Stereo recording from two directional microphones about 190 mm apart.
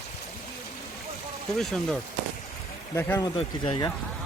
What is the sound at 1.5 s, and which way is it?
Speech, 5° left (ahead or behind).